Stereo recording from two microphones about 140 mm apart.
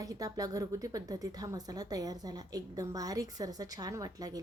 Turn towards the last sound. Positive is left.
turn(degrees=-25)  # may be behind; listen again after turning